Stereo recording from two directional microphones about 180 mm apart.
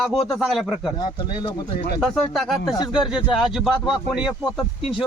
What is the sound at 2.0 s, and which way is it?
Speech, centre (ahead or behind).